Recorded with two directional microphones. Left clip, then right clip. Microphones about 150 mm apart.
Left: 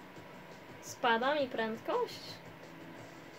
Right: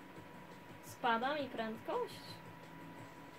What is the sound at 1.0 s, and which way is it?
Speech, 60° left (ahead or behind).